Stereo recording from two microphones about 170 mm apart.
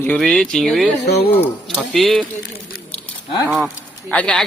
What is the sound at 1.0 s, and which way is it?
Speech, 70° left (ahead or behind).